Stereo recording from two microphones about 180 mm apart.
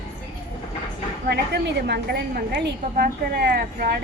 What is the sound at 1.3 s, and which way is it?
A woman's voice, 65° right (ahead or behind).